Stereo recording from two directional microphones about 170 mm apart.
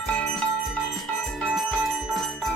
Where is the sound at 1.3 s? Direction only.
Centre (ahead or behind).